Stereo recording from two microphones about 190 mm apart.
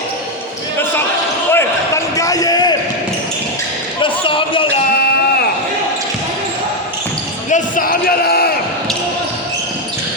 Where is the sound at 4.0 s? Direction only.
25° left (ahead or behind).